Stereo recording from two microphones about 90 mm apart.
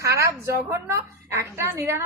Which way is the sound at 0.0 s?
35° right (ahead or behind).